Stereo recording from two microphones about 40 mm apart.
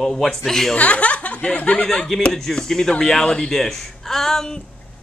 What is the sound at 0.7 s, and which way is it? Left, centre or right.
Speech, left.